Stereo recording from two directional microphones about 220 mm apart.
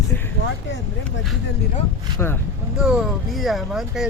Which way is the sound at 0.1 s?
10° left (ahead or behind).